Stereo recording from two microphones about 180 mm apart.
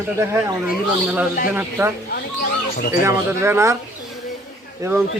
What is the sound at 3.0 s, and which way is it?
Speech, 15° right (ahead or behind).